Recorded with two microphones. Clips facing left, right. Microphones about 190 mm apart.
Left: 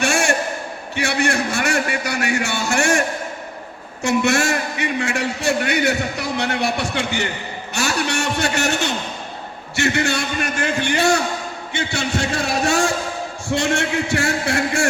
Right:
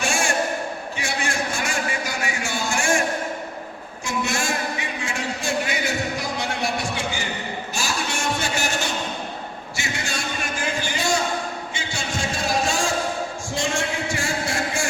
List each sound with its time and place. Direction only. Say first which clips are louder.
0.0 s a sound: left 5 dB; 65° left (ahead or behind)
0.9 s a man's voice: left 9 dB; 70° left (ahead or behind)
4.0 s a man's voice: left 8 dB; 70° left (ahead or behind)